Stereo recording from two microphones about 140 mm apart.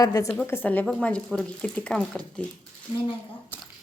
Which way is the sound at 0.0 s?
25° left (ahead or behind).